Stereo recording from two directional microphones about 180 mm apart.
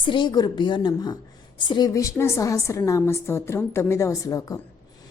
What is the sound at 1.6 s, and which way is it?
A woman's voice, 25° left (ahead or behind).